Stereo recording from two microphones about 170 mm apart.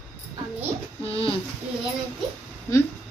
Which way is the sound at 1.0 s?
35° left (ahead or behind).